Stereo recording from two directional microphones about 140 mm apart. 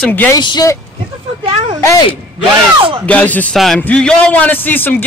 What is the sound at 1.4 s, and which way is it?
Speech, 40° right (ahead or behind).